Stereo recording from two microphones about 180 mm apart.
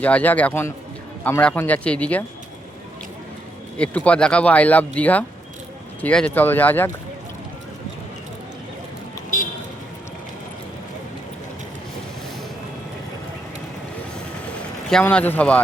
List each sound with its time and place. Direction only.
0.0 s speech: 10° left (ahead or behind)
3.8 s speech: 5° left (ahead or behind)
9.3 s vehicle: 45° left (ahead or behind)
14.8 s speech: 5° left (ahead or behind)